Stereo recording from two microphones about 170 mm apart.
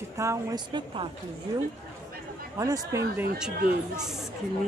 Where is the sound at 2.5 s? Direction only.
20° right (ahead or behind).